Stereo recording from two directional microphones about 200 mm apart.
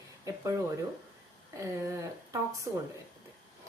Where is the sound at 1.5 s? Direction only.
15° right (ahead or behind).